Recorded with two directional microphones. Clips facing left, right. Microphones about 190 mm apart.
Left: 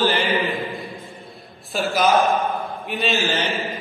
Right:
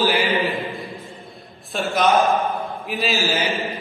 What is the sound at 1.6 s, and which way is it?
A man's voice, centre (ahead or behind).